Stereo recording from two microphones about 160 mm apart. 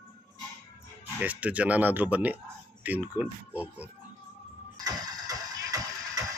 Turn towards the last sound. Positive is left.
turn(degrees=-20)  # may be behind; listen again after turning